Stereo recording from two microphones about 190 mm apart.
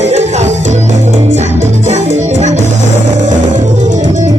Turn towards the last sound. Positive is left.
turn(degrees=-40)  # may be behind; listen again after turning